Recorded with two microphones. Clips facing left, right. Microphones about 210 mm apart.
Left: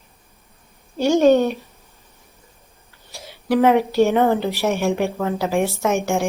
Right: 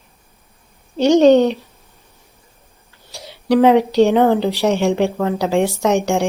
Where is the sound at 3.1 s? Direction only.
15° right (ahead or behind).